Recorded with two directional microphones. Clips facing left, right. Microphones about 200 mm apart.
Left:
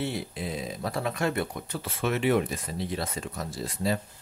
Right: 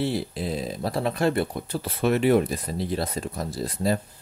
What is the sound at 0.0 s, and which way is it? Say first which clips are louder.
Speech: right 5 dB; 35° right (ahead or behind).